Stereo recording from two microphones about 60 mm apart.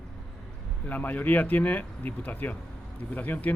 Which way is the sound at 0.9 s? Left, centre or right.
Left.